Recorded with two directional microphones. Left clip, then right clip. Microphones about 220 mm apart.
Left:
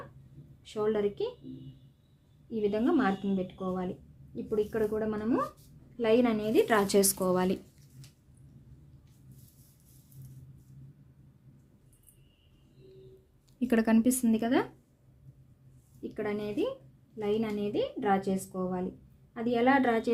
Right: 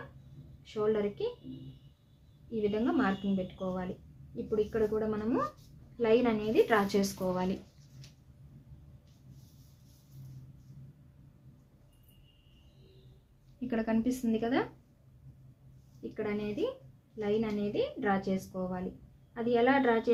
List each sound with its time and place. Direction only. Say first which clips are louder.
0.6 s a woman's voice: left 1 dB; 35° left (ahead or behind)
2.6 s a woman's voice: left 2 dB; 35° left (ahead or behind); by 7.5 s 50° left (ahead or behind)
13.6 s speech: left 6 dB; 50° left (ahead or behind)
16.0 s a woman's voice: left 2 dB; 35° left (ahead or behind)